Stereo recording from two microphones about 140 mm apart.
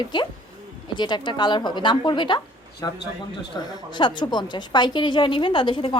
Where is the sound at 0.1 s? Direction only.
35° left (ahead or behind).